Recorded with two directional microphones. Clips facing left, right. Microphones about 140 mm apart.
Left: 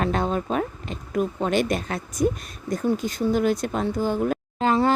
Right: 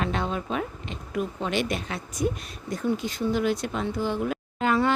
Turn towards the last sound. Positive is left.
turn(degrees=30)  # may be behind; listen again after turning